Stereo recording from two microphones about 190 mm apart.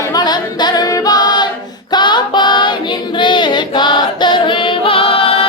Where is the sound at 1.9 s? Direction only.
25° left (ahead or behind).